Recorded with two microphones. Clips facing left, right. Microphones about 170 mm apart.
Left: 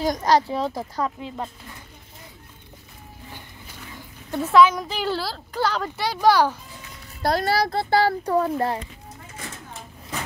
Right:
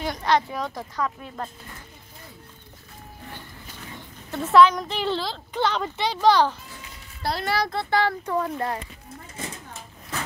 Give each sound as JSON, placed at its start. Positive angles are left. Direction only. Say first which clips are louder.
{"t": 0.0, "sound": "a child's voice", "louder": "left 3 dB", "side_deg": 40}
{"t": 4.4, "sound": "speech", "louder": "even", "side_deg": 0}
{"t": 7.2, "sound": "a child's voice", "louder": "left 4 dB", "side_deg": 40}